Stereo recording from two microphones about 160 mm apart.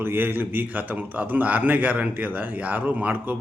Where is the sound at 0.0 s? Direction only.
15° right (ahead or behind).